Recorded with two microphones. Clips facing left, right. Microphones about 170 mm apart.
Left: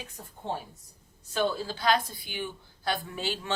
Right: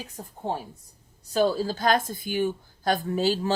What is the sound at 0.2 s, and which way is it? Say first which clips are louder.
Speech: right 4 dB; 35° right (ahead or behind).